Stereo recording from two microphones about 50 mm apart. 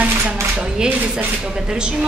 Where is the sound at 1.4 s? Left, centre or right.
Centre.